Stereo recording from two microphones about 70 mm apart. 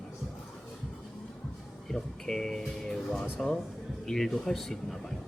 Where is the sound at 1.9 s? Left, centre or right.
Centre.